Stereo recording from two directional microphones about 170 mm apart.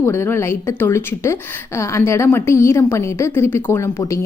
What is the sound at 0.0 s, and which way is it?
A woman's voice, 15° left (ahead or behind).